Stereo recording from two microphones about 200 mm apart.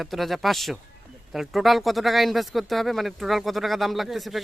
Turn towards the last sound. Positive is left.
turn(degrees=0)  # may be behind; listen again after turning